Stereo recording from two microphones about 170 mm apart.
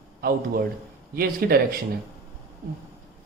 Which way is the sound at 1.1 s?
60° right (ahead or behind).